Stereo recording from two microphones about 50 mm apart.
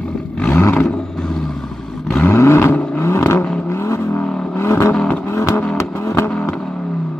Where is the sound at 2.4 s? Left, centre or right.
Left.